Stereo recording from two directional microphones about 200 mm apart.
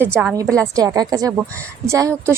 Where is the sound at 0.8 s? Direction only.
20° right (ahead or behind).